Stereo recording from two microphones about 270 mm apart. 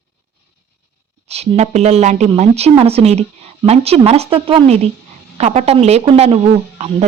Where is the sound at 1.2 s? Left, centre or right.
Right.